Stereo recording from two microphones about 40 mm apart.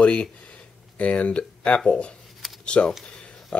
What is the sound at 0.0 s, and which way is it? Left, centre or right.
Speech, left.